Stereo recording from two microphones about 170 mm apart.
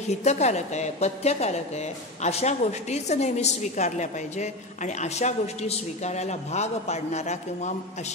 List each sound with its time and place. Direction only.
0.1 s a woman's voice: 40° left (ahead or behind)